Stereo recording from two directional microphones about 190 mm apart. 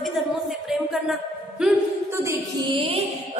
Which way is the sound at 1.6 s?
5° right (ahead or behind).